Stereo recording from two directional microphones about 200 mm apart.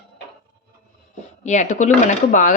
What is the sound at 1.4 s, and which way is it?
Speech, 35° left (ahead or behind).